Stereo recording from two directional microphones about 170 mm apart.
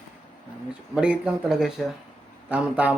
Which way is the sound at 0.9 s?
5° right (ahead or behind).